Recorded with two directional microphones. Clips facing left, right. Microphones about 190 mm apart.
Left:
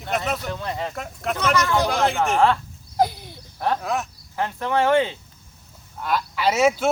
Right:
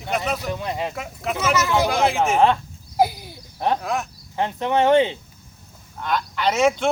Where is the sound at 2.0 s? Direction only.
Centre (ahead or behind).